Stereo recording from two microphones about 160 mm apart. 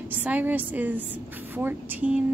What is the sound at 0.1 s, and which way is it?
A woman's voice, 10° right (ahead or behind).